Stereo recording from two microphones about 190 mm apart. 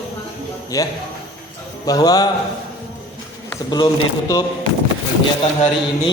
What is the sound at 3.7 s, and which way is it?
Speech, 20° left (ahead or behind).